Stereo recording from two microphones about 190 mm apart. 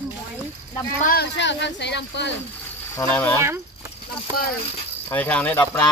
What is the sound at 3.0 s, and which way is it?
Speech, 10° left (ahead or behind).